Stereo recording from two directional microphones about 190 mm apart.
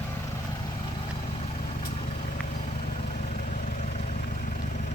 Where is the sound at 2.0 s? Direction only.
35° left (ahead or behind).